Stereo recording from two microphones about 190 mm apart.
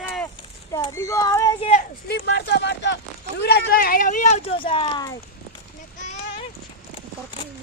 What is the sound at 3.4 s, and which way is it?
Speech, 55° left (ahead or behind).